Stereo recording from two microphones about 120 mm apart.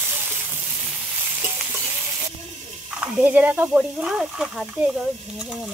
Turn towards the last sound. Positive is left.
turn(degrees=-5)  # may be behind; listen again after turning